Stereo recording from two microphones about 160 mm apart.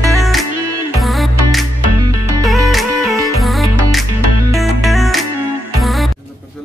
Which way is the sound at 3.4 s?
Centre (ahead or behind).